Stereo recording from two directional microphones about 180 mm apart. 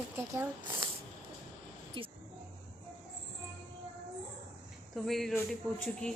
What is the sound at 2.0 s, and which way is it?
Speech, 30° right (ahead or behind).